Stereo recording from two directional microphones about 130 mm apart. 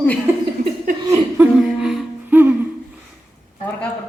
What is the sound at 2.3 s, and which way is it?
Music, 15° right (ahead or behind).